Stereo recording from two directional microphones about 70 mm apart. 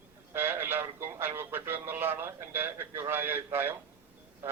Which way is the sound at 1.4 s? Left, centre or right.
Right.